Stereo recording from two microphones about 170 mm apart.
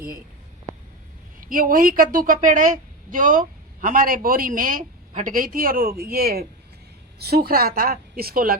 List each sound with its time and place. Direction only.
1.4 s a woman's voice: 55° right (ahead or behind)